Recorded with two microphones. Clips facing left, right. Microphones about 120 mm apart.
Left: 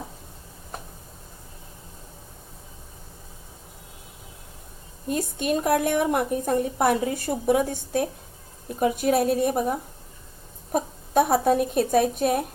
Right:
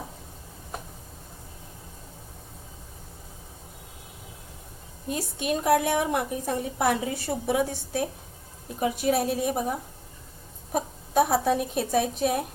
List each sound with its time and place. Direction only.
5.1 s a woman's voice: 50° left (ahead or behind)